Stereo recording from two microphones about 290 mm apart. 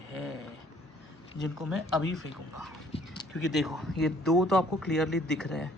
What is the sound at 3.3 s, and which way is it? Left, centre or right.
Speech, centre.